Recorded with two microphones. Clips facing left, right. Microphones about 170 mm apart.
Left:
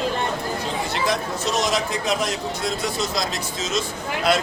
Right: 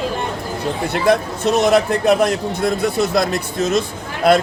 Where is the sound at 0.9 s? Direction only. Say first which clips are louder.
Right 10 dB; 55° right (ahead or behind).